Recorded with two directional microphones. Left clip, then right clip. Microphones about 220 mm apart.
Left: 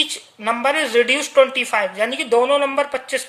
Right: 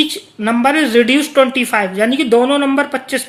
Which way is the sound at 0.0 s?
10° right (ahead or behind).